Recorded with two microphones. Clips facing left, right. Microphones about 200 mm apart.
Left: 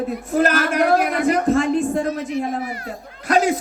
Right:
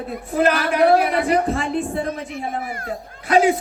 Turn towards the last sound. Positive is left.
turn(degrees=40)  # may be behind; listen again after turning